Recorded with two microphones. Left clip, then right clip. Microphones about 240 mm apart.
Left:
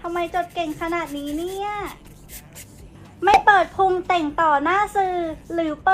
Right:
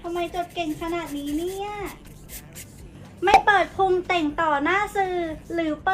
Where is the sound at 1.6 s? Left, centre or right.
Centre.